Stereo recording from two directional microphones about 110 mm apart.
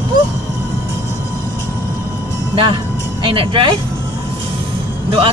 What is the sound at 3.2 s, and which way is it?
Speech, 50° right (ahead or behind).